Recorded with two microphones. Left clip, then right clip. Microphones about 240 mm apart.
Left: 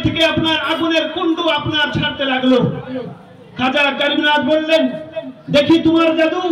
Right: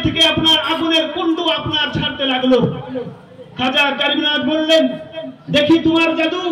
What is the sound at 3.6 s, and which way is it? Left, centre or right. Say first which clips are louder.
A man's voice: even; left.